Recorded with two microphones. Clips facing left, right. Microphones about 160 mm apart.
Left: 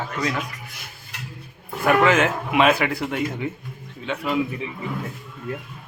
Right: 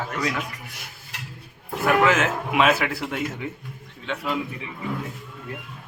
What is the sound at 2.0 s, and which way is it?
Speech, centre (ahead or behind).